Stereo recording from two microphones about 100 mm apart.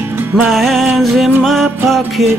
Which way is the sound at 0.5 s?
Centre (ahead or behind).